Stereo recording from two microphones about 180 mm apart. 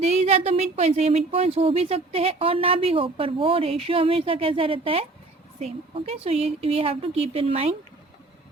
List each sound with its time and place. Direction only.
0.0 s speech: 35° right (ahead or behind)